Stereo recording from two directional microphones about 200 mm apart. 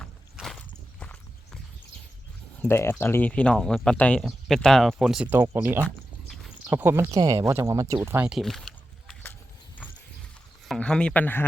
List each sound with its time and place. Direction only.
0.0 s walk: centre (ahead or behind)
2.6 s speech: 10° left (ahead or behind)
10.7 s speech: 5° left (ahead or behind)